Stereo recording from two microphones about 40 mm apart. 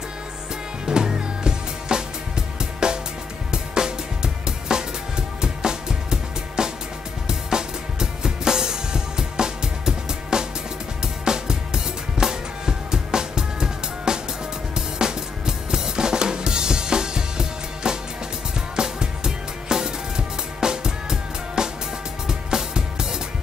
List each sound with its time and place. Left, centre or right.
0.8 s music: centre
7.2 s drum kit: centre
11.2 s music: centre
14.7 s drum kit: centre
18.8 s music: centre